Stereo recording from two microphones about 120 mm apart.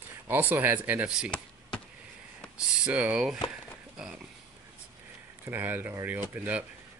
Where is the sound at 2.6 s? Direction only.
5° right (ahead or behind).